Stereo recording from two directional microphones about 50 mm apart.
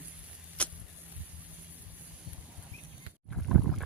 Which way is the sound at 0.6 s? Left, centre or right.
Left.